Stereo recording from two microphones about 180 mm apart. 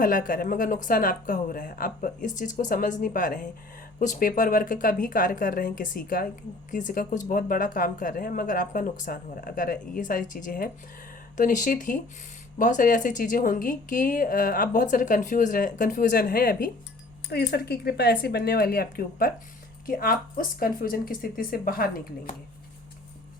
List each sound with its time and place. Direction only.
0.0 s a woman's voice: 50° left (ahead or behind)
17.2 s a woman's voice: 65° left (ahead or behind)